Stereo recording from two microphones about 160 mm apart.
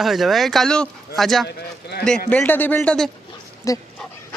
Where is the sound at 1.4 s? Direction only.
90° left.